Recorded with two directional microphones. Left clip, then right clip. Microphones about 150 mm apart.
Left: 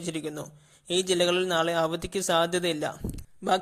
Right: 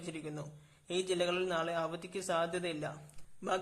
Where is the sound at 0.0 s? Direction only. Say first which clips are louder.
Left 10 dB; 40° left (ahead or behind).